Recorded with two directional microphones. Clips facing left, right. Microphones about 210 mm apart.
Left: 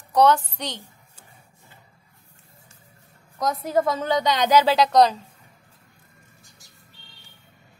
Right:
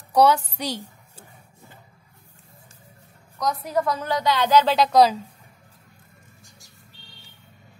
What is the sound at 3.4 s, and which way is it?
A woman's voice, 25° left (ahead or behind).